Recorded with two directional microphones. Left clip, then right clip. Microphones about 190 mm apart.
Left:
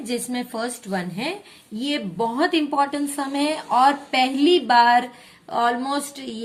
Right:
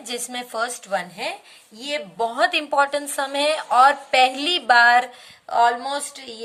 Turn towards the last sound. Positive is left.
turn(degrees=-15)  # may be behind; listen again after turning